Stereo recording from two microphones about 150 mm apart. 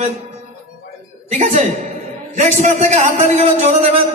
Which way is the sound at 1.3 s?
50° right (ahead or behind).